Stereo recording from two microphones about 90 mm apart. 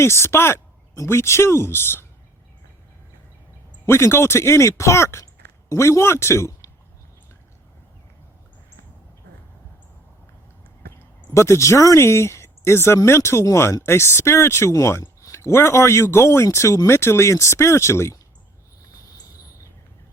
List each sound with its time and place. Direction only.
0.0 s speech: 30° left (ahead or behind)
3.8 s speech: 30° left (ahead or behind)
11.3 s speech: 35° left (ahead or behind)
19.0 s a sound: 45° left (ahead or behind)